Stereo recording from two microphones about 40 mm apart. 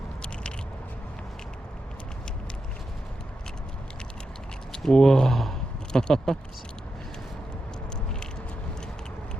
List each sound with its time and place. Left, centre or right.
4.8 s speech: centre